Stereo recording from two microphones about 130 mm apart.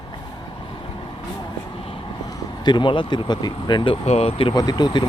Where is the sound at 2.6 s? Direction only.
35° left (ahead or behind).